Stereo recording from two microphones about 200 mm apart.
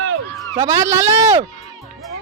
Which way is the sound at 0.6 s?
15° right (ahead or behind).